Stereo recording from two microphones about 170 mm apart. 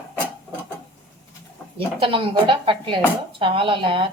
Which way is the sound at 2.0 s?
30° right (ahead or behind).